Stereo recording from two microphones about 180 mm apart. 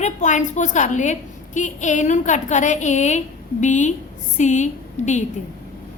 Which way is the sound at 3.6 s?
40° left (ahead or behind).